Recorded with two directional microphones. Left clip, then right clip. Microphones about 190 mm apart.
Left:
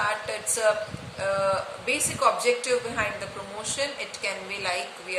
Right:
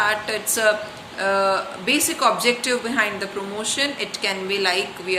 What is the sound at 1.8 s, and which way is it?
A woman's voice, 15° left (ahead or behind).